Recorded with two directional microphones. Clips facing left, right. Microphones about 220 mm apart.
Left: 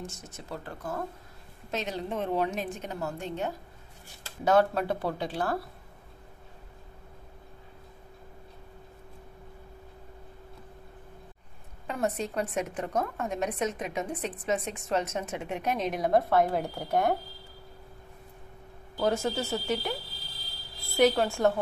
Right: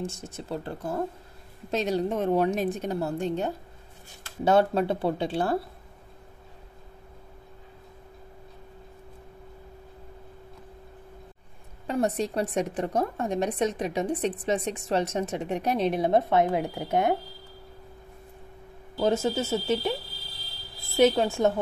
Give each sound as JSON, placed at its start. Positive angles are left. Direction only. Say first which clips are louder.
{"t": 0.0, "sound": "a woman's voice", "louder": "right 7 dB", "side_deg": -30}
{"t": 11.9, "sound": "a woman's voice", "louder": "right 4 dB", "side_deg": -35}
{"t": 18.9, "sound": "speech", "louder": "right 3 dB", "side_deg": -20}